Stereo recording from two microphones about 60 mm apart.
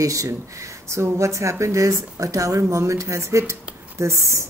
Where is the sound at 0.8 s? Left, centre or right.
Right.